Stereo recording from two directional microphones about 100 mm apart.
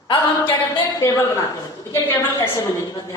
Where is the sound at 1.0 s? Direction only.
30° left (ahead or behind).